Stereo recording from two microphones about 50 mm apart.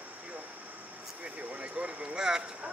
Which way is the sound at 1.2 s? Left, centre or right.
Right.